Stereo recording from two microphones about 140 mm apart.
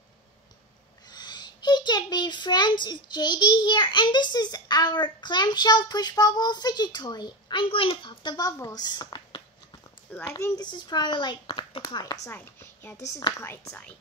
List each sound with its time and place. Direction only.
1.1 s a child's voice: 30° left (ahead or behind)
10.1 s a child's voice: 20° left (ahead or behind)
12.3 s a woman's voice: 15° left (ahead or behind)